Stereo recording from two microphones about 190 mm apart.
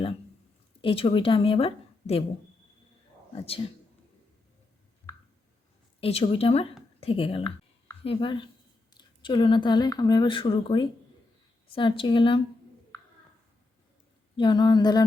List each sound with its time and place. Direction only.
0.8 s a woman's voice: 30° left (ahead or behind)
3.3 s a woman's voice: 30° left (ahead or behind)
6.0 s a woman's voice: 30° left (ahead or behind)
14.3 s speech: 25° left (ahead or behind)